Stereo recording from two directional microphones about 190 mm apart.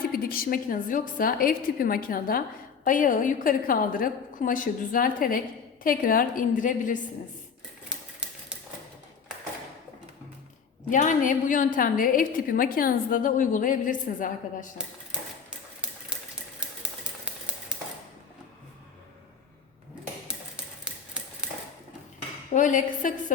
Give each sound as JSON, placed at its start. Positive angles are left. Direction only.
{"t": 0.1, "sound": "a woman's voice", "side_deg": 50}
{"t": 10.9, "sound": "a woman's voice", "side_deg": 40}
{"t": 15.8, "sound": "typewriter", "side_deg": -5}
{"t": 22.5, "sound": "a woman's voice", "side_deg": 40}